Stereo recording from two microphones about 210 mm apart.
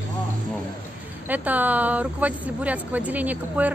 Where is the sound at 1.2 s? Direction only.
10° right (ahead or behind).